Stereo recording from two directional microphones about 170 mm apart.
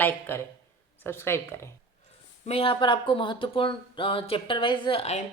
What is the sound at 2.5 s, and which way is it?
Speech, 35° left (ahead or behind).